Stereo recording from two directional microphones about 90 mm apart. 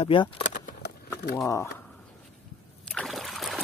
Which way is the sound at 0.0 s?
70° left (ahead or behind).